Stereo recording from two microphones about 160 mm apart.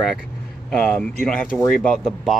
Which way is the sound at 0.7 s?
5° left (ahead or behind).